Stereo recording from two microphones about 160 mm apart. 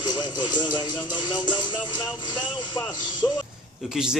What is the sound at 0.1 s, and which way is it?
Speech, 25° left (ahead or behind).